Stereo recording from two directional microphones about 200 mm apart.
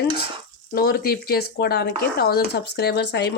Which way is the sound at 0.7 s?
50° left (ahead or behind).